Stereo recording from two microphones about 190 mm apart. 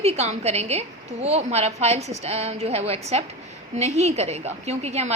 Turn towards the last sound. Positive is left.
turn(degrees=-35)  # may be behind; listen again after turning